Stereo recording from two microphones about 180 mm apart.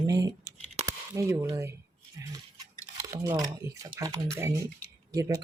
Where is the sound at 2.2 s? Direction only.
20° right (ahead or behind).